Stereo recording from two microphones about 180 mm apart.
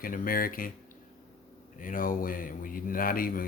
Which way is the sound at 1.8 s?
50° left (ahead or behind).